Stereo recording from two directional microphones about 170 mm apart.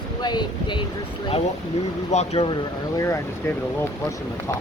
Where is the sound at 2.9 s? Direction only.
15° left (ahead or behind).